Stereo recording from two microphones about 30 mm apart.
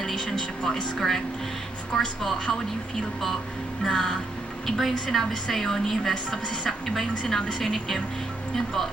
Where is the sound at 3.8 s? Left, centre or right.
Centre.